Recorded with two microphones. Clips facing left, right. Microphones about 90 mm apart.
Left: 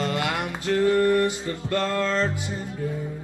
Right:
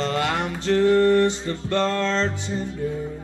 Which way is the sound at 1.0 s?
10° left (ahead or behind).